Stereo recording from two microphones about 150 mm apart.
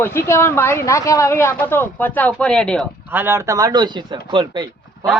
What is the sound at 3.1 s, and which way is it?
Speech, 15° right (ahead or behind).